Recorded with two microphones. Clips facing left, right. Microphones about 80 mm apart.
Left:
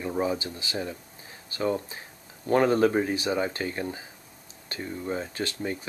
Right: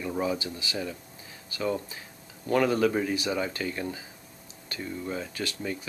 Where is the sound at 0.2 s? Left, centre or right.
Left.